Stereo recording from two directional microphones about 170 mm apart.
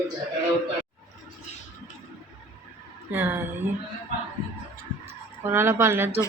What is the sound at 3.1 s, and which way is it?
Speech, 15° right (ahead or behind).